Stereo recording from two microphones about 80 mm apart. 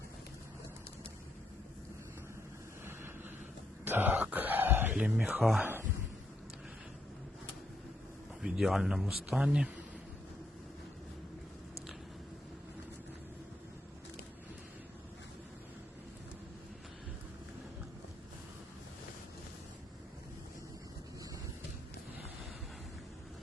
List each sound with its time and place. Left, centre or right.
2.8 s vehicle: right
3.8 s a sound: right
4.9 s speech: centre
8.5 s speech: centre